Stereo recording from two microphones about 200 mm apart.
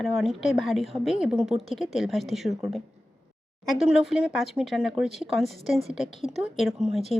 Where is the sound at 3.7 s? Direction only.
Centre (ahead or behind).